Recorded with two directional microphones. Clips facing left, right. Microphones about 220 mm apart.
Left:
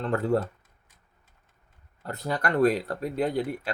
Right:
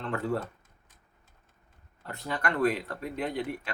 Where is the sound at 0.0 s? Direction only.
40° left (ahead or behind).